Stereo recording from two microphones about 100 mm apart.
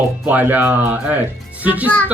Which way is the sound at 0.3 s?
15° right (ahead or behind).